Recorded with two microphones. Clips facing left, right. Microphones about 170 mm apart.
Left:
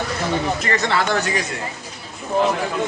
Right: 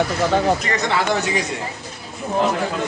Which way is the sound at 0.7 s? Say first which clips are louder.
Left 1 dB; 15° right (ahead or behind).